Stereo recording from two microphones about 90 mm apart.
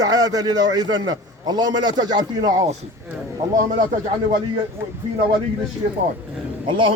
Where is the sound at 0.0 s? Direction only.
45° right (ahead or behind).